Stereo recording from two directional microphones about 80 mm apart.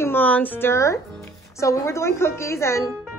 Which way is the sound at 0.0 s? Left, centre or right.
Left.